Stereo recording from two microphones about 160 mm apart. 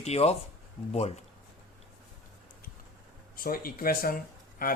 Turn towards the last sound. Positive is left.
turn(degrees=65)  # may be behind; listen again after turning